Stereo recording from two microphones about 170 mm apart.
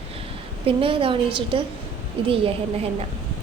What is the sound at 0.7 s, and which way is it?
A woman's voice, 30° right (ahead or behind).